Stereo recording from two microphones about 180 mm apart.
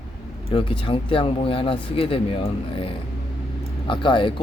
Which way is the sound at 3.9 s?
25° left (ahead or behind).